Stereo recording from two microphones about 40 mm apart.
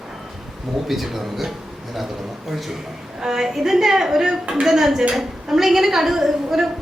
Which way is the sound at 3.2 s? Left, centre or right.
Centre.